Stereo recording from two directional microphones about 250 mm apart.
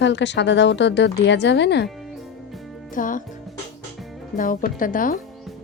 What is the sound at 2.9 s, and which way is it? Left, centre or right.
Speech, left.